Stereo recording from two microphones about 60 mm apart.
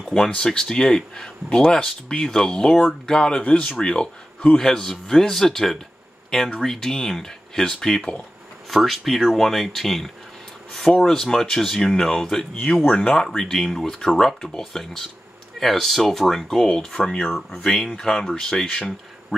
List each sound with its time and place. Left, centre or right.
0.0 s speech: centre
4.6 s speech: centre
8.6 s speech: centre
17.3 s speech: centre